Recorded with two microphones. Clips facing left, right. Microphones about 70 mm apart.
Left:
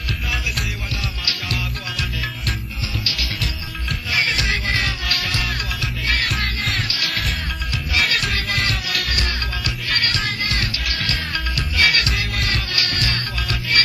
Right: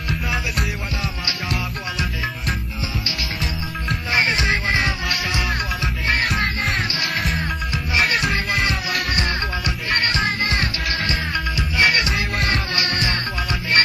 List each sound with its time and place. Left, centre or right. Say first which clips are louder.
1.2 s music: right 1 dB; centre
3.9 s music: right 2 dB; right
7.1 s music: right 2 dB; centre
7.3 s music: right 3 dB; right